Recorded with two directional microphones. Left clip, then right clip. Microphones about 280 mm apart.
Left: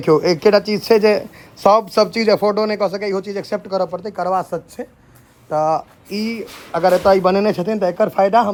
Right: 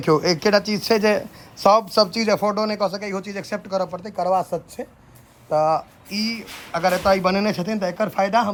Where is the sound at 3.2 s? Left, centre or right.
Centre.